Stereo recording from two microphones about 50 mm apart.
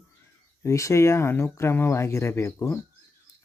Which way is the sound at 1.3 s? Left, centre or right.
Left.